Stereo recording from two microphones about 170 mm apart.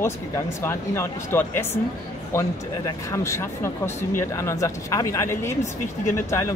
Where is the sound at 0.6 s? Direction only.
15° left (ahead or behind).